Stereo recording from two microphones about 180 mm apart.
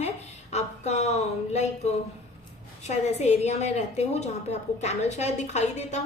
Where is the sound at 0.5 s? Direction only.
40° left (ahead or behind).